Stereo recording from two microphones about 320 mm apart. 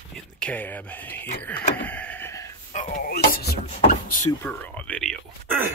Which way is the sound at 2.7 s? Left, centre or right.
Left.